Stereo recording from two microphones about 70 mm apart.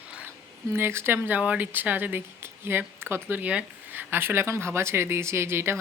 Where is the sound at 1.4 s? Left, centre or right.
Right.